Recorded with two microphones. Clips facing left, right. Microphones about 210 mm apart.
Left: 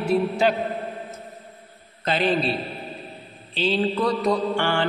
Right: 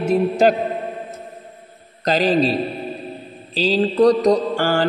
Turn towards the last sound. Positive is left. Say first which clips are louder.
# right 4 dB
turn(degrees=-40)  # may be behind; listen again after turning